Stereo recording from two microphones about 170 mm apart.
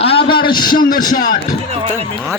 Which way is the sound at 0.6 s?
55° left (ahead or behind).